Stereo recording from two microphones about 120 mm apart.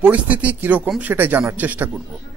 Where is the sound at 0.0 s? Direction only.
10° right (ahead or behind).